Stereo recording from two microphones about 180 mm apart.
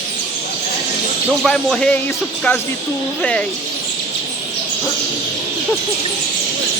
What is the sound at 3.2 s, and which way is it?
Speech, 5° left (ahead or behind).